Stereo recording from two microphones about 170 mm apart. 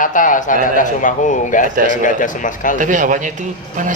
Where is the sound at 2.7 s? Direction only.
50° right (ahead or behind).